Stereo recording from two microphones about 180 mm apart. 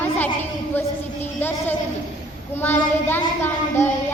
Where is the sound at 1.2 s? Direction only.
10° left (ahead or behind).